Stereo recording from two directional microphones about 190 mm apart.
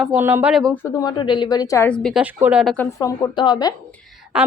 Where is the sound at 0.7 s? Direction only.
15° left (ahead or behind); by 2.8 s 5° right (ahead or behind).